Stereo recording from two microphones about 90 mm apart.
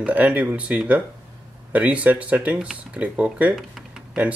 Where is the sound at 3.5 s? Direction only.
Centre (ahead or behind).